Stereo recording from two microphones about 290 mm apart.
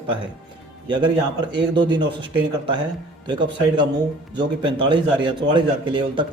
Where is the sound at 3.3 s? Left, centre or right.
Centre.